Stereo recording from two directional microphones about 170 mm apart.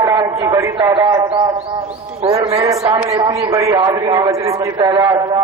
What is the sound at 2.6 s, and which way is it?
Speech, 20° right (ahead or behind).